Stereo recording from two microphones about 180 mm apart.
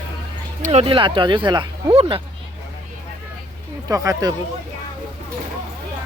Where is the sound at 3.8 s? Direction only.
20° right (ahead or behind).